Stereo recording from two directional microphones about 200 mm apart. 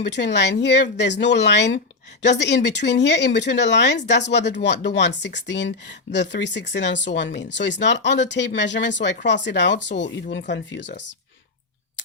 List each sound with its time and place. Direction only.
0.0 s speech: 60° left (ahead or behind)